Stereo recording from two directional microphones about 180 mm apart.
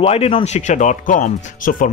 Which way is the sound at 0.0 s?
35° left (ahead or behind).